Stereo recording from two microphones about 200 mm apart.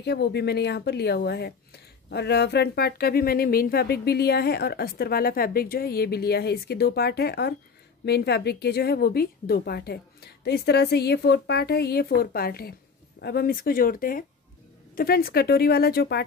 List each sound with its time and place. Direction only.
0.0 s a woman's voice: 55° left (ahead or behind)